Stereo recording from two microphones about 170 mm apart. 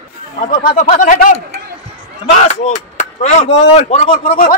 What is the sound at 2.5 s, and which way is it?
Speech, 45° left (ahead or behind).